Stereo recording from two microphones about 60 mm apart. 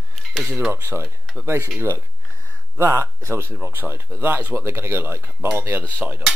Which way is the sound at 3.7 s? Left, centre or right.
Right.